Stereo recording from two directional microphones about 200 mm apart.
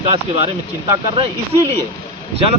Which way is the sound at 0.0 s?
30° right (ahead or behind).